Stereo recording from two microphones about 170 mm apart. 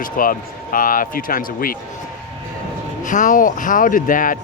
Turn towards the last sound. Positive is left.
turn(degrees=55)  # may be behind; listen again after turning